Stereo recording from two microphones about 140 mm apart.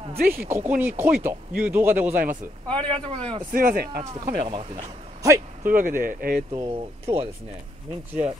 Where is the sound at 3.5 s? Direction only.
85° right.